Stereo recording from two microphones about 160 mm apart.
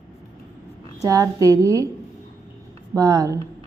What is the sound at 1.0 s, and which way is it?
Speech, 20° right (ahead or behind).